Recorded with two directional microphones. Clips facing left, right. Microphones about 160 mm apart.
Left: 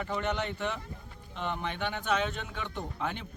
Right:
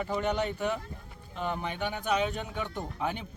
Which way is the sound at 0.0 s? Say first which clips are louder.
Right 3 dB; 10° right (ahead or behind).